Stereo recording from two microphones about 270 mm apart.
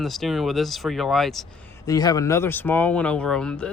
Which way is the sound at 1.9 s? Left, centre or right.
Centre.